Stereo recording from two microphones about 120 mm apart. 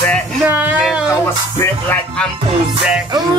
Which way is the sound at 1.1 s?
20° left (ahead or behind).